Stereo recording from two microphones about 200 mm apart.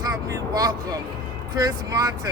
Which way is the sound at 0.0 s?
15° right (ahead or behind).